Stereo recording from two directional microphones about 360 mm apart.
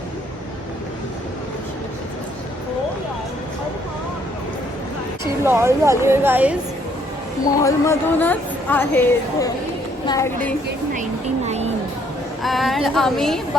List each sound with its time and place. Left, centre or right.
5.2 s a woman's voice: centre
7.6 s a woman's voice: centre
11.4 s music: centre
12.4 s a woman's voice: centre